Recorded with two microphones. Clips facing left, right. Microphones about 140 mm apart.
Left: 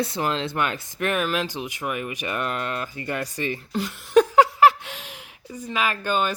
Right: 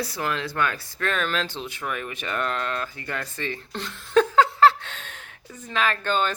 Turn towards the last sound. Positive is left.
turn(degrees=10)  # may be behind; listen again after turning